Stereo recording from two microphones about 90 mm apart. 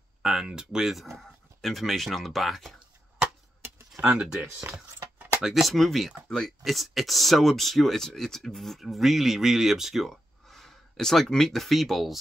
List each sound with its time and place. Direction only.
0.2 s speech: 5° right (ahead or behind)
3.6 s a sound: 30° right (ahead or behind)
4.0 s speech: 10° right (ahead or behind)
4.5 s speech: 30° right (ahead or behind)
5.4 s speech: centre (ahead or behind)